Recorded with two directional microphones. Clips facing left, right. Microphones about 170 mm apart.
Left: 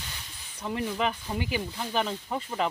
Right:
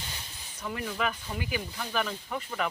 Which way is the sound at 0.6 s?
25° left (ahead or behind).